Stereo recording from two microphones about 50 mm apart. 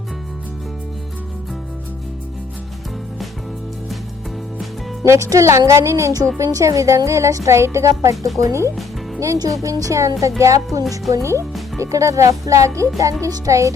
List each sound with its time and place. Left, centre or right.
5.0 s speech: right
8.4 s speech: right
9.2 s speech: right
11.2 s speech: right
11.8 s speech: right